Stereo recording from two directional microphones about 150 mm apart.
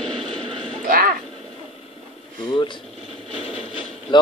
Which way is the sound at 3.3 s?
40° left (ahead or behind).